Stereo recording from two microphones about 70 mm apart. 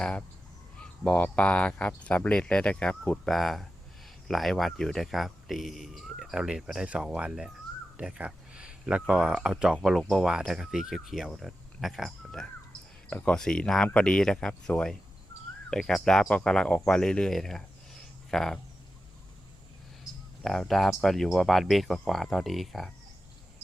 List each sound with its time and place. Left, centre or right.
0.0 s speech: centre
20.4 s speech: centre